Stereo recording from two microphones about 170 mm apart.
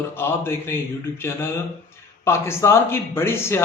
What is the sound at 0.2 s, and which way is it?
Speech, 15° left (ahead or behind).